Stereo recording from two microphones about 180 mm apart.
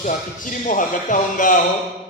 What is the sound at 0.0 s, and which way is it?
A man's voice, 45° left (ahead or behind).